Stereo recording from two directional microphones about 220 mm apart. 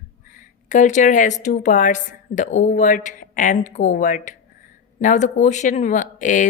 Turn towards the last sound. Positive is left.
turn(degrees=35)  # may be behind; listen again after turning